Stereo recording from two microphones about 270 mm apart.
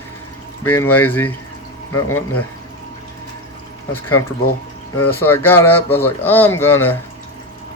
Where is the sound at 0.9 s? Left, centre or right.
Centre.